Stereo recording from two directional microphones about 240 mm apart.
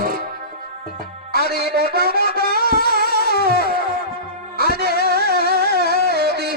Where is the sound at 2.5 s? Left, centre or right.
Left.